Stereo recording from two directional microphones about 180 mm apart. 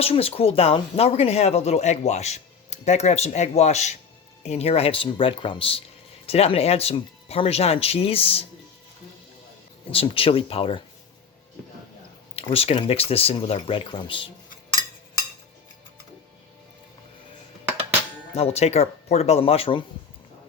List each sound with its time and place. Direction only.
0.0 s speech: 35° left (ahead or behind)
9.9 s speech: 30° left (ahead or behind)
12.4 s speech: 30° left (ahead or behind)
18.3 s speech: 35° left (ahead or behind)